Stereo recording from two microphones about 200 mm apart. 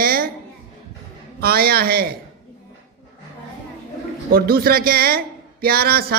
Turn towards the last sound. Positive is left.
turn(degrees=-50)  # may be behind; listen again after turning